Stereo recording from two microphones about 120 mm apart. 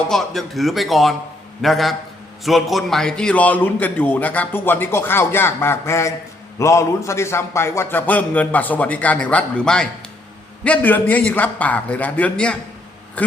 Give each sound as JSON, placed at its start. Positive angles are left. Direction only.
{"t": 0.1, "sound": "a man's voice", "side_deg": 0}